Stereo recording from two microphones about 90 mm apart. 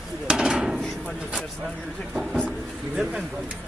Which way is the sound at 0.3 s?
5° right (ahead or behind).